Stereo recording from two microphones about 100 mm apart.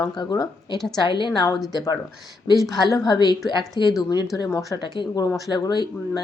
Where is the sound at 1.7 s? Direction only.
40° left (ahead or behind).